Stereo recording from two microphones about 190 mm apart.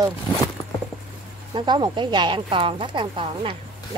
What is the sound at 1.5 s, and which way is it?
Speech, 25° right (ahead or behind).